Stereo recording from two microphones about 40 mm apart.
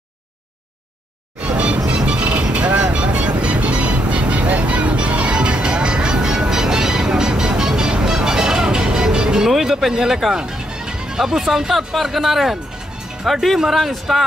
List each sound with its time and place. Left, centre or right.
1.4 s music: right
9.5 s speech: centre